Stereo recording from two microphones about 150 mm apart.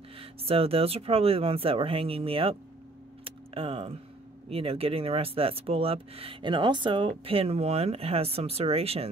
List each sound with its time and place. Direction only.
0.2 s speech: 40° right (ahead or behind)
3.3 s a sound: 40° right (ahead or behind)
4.5 s speech: 40° right (ahead or behind)